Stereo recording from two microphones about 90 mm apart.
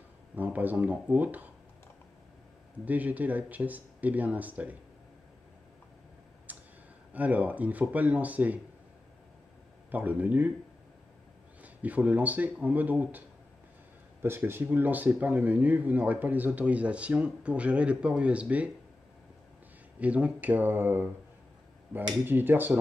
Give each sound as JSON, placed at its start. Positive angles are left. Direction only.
{"t": 0.4, "sound": "speech", "side_deg": -20}
{"t": 2.8, "sound": "speech", "side_deg": -20}
{"t": 6.5, "sound": "a sound", "side_deg": -20}
{"t": 7.1, "sound": "speech", "side_deg": -15}
{"t": 9.8, "sound": "speech", "side_deg": -20}
{"t": 11.6, "sound": "speech", "side_deg": -15}
{"t": 14.2, "sound": "speech", "side_deg": -25}
{"t": 20.0, "sound": "speech", "side_deg": -15}
{"t": 22.2, "sound": "speech", "side_deg": -20}